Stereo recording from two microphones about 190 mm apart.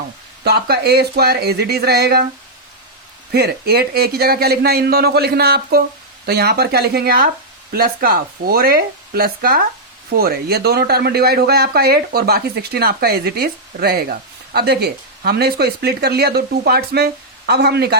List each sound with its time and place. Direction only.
0.4 s a man's voice: 55° right (ahead or behind)
3.3 s a man's voice: 55° right (ahead or behind)